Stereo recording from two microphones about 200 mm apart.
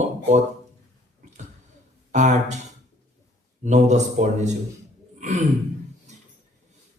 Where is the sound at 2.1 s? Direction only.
35° right (ahead or behind).